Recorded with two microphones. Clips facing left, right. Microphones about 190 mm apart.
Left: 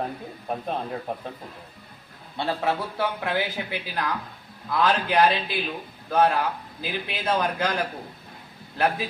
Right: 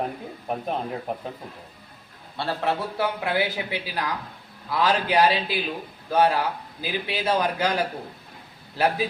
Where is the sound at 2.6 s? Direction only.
Centre (ahead or behind).